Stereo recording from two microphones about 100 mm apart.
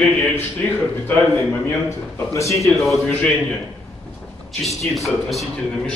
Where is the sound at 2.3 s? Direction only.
30° left (ahead or behind).